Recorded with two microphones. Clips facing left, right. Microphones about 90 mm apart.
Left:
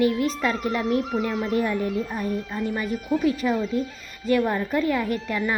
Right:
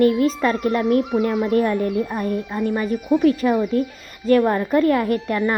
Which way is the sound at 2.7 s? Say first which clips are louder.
Right 6 dB; 20° right (ahead or behind).